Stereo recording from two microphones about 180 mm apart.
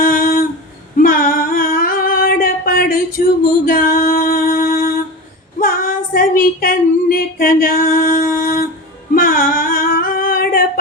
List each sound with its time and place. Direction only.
0.0 s a sound: 55° left (ahead or behind)
3.7 s music: 55° left (ahead or behind)
5.5 s female singing: 55° left (ahead or behind)
9.1 s singing: 50° left (ahead or behind)